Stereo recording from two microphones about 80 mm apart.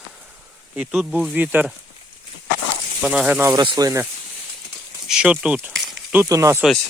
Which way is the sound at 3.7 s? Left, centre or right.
Right.